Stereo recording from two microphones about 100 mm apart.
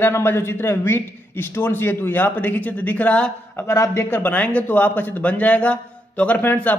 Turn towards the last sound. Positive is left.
turn(degrees=20)  # may be behind; listen again after turning